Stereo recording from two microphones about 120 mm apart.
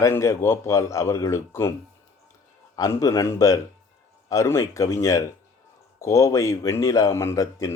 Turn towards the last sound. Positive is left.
turn(degrees=25)  # may be behind; listen again after turning